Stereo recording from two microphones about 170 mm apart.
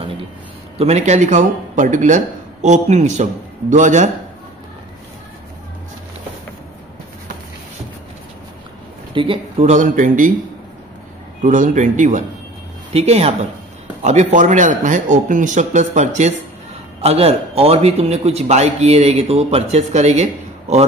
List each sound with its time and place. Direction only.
0.7 s speech: 40° right (ahead or behind)
9.1 s speech: 30° right (ahead or behind); by 10.3 s 50° right (ahead or behind)
11.4 s a man's voice: 50° right (ahead or behind)